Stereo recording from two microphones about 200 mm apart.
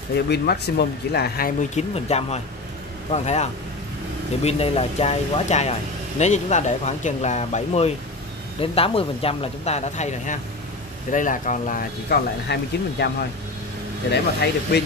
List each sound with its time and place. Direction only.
0.3 s speech: 55° left (ahead or behind)
1.8 s a man's voice: 30° left (ahead or behind); by 14.8 s 55° left (ahead or behind)